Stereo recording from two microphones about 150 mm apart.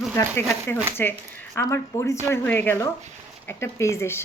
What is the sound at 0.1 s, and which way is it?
Speech, 15° left (ahead or behind).